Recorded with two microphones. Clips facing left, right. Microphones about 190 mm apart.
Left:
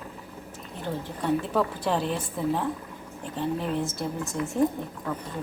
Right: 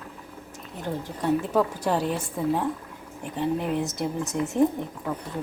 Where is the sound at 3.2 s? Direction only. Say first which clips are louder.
Right 2 dB; 15° right (ahead or behind).